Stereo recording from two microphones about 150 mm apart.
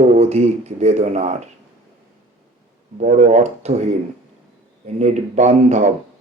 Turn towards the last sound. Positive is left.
turn(degrees=-50)  # may be behind; listen again after turning